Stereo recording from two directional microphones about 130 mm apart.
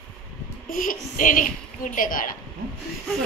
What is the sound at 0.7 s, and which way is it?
A child's voice, 90° left.